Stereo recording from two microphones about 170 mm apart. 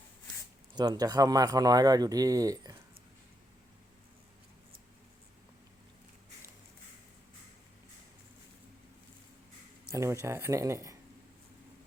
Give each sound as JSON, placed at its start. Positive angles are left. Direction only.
{"t": 0.8, "sound": "speech", "side_deg": -20}
{"t": 9.9, "sound": "speech", "side_deg": -15}